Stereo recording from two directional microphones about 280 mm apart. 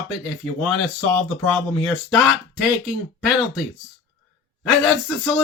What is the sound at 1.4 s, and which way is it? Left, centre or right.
Speech, centre.